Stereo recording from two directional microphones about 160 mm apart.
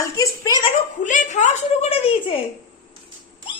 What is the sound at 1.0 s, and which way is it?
Speech, 50° left (ahead or behind).